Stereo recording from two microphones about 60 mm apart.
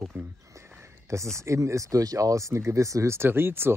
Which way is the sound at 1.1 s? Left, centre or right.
Right.